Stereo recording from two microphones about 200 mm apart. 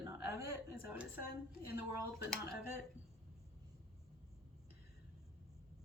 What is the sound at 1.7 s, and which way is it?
Speech, 10° right (ahead or behind).